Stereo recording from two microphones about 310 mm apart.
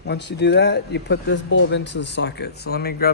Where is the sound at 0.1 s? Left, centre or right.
Left.